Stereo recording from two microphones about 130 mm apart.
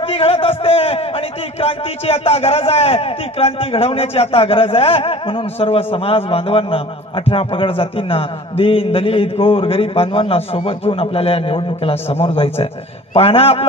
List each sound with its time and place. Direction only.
0.0 s a man's voice: 50° left (ahead or behind)